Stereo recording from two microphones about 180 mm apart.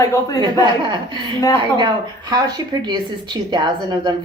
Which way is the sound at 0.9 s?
25° right (ahead or behind).